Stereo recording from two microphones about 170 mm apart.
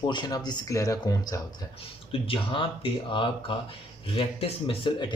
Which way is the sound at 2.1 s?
30° left (ahead or behind).